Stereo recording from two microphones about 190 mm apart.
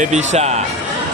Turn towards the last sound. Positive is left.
turn(degrees=-35)  # may be behind; listen again after turning